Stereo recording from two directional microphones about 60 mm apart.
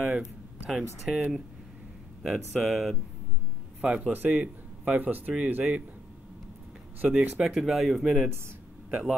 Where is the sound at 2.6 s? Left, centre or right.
Centre.